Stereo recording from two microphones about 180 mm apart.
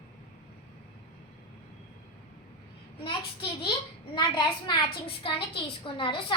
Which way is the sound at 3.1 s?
25° left (ahead or behind).